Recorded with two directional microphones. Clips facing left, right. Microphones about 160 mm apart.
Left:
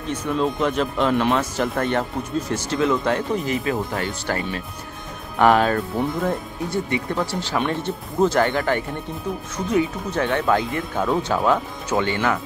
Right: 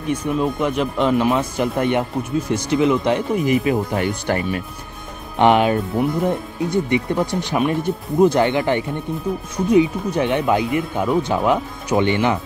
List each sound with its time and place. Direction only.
0.0 s speech: 10° right (ahead or behind)